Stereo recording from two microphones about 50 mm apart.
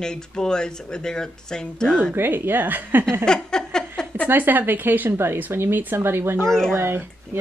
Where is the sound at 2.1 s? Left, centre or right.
Right.